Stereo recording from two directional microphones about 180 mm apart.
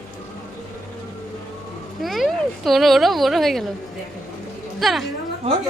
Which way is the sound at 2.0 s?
Centre (ahead or behind).